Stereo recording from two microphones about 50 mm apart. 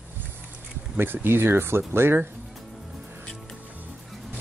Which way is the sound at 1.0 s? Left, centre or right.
Right.